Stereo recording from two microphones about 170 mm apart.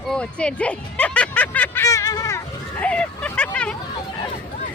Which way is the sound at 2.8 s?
10° left (ahead or behind).